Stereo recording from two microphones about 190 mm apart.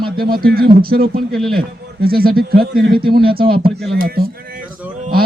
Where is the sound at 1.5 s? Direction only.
55° right (ahead or behind).